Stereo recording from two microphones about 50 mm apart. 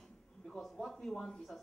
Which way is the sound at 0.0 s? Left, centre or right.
Centre.